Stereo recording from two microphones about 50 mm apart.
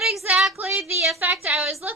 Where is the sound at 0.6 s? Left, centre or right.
Right.